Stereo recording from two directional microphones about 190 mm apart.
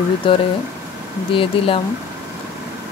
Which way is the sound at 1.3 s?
30° left (ahead or behind).